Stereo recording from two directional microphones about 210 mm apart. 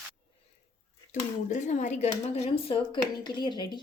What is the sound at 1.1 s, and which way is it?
Speech, 35° left (ahead or behind).